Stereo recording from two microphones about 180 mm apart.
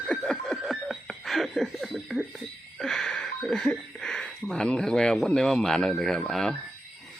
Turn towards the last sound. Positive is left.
turn(degrees=5)  # may be behind; listen again after turning